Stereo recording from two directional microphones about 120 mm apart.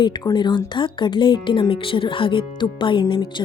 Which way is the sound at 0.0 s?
40° left (ahead or behind).